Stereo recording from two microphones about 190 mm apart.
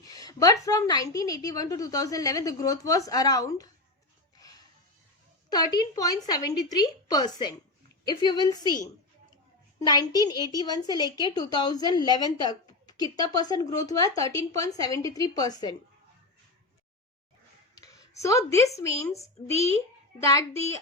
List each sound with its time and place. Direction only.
0.0 s a woman's voice: 20° left (ahead or behind)
5.5 s a woman's voice: 20° left (ahead or behind)
9.8 s a woman's voice: 20° left (ahead or behind)
17.7 s a sound: 15° left (ahead or behind)
18.8 s speech: 15° left (ahead or behind)